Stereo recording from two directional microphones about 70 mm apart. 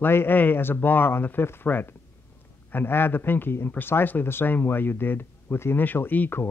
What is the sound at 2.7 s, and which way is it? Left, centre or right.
A man's voice, left.